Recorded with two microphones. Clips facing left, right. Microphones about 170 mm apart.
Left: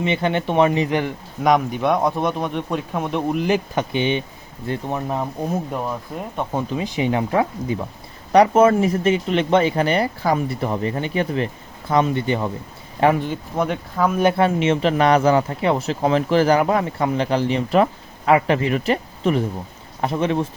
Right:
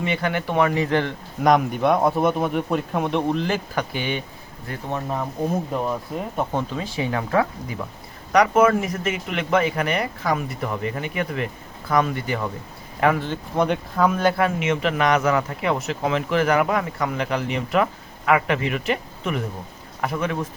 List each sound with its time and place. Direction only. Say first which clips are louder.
0.0 s speech: left 3 dB; 20° left (ahead or behind)
1.5 s speech: even; centre (ahead or behind)
3.3 s speech: left 4 dB; 15° left (ahead or behind)
6.5 s speech: left 2 dB; 15° left (ahead or behind)
13.6 s speech: right 1 dB; centre (ahead or behind)
14.2 s a man's voice: left 3 dB; 25° left (ahead or behind)